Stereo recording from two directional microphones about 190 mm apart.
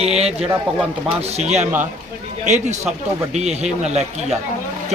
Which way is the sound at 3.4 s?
35° right (ahead or behind).